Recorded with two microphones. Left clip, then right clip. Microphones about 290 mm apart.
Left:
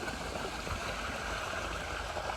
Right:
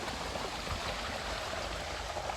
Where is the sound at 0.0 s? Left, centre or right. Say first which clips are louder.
Even; right.